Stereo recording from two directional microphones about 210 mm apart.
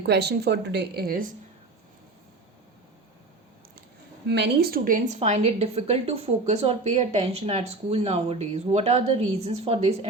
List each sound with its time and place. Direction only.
0.0 s speech: 50° right (ahead or behind)
4.3 s a woman's voice: 50° right (ahead or behind); by 10.1 s 30° right (ahead or behind)